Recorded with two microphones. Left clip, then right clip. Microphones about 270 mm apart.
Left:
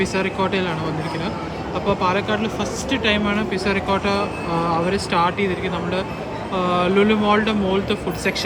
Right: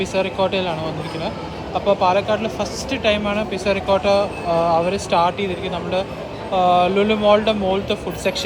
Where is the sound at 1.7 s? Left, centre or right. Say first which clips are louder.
Right 4 dB; right.